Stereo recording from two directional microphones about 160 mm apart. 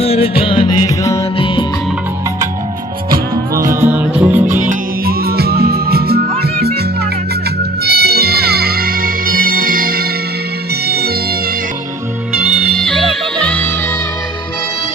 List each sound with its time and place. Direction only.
0.0 s music: 40° left (ahead or behind)
3.6 s music: 15° right (ahead or behind)
4.7 s music: 75° right (ahead or behind)
7.9 s music: 80° right
10.8 s music: 80° right
12.3 s music: 5° right (ahead or behind)